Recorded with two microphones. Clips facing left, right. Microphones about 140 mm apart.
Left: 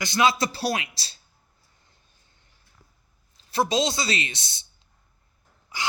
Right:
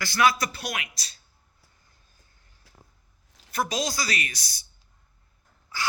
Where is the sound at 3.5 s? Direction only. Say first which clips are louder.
Left 5 dB; 25° left (ahead or behind).